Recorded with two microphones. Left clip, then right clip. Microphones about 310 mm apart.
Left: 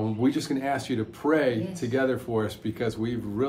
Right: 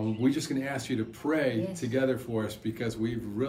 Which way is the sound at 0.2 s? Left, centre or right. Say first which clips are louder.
Left 3 dB; centre.